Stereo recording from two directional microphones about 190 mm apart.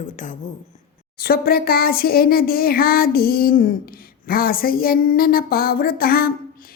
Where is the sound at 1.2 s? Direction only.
55° left (ahead or behind).